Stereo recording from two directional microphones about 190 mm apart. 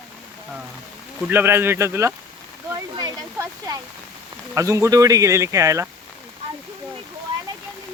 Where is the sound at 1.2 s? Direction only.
10° right (ahead or behind).